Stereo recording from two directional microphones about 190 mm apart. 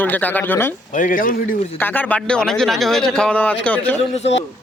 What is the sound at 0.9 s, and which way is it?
Speech, 45° left (ahead or behind).